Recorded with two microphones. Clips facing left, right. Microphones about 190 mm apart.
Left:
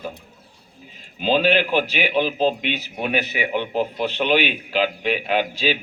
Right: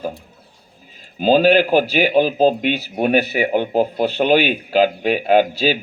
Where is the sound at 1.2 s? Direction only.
40° right (ahead or behind).